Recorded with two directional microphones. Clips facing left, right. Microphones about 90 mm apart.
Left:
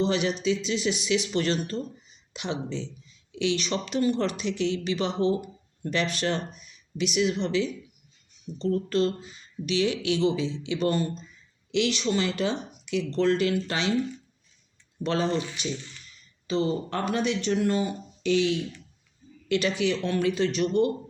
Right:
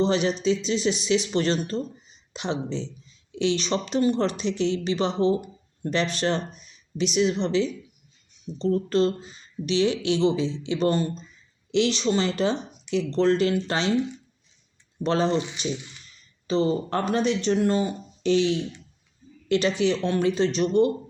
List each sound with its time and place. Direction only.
0.0 s speech: 30° right (ahead or behind)
13.9 s speech: 20° right (ahead or behind)
15.0 s speech: 30° right (ahead or behind)
16.5 s speech: 35° right (ahead or behind)